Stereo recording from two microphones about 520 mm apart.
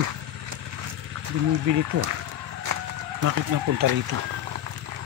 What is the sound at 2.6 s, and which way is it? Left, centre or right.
Run, right.